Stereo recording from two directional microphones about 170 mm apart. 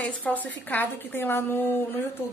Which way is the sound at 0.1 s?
10° left (ahead or behind).